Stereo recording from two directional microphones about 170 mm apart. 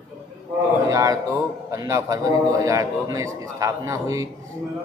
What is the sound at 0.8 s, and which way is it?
A man's voice, 20° right (ahead or behind).